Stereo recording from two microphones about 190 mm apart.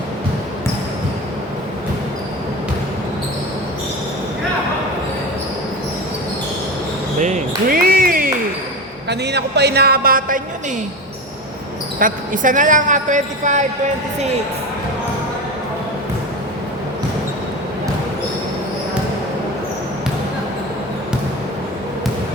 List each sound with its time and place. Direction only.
7.2 s basketball bounce: 45° right (ahead or behind)
9.0 s a man's voice: 60° right (ahead or behind); by 10.4 s 45° right (ahead or behind)
11.9 s a woman's voice: 45° right (ahead or behind)